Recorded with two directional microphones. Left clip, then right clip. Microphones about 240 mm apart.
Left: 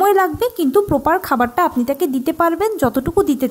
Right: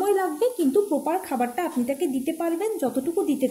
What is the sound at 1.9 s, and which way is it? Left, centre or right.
A woman's voice, left.